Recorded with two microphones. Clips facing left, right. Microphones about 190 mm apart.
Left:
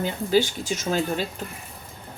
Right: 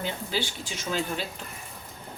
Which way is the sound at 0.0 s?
45° left (ahead or behind).